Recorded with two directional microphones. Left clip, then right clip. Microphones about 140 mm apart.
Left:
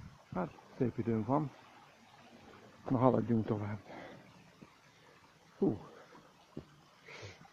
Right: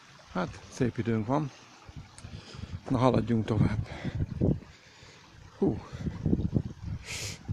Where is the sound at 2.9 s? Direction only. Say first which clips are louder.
Right 4 dB; 10° right (ahead or behind).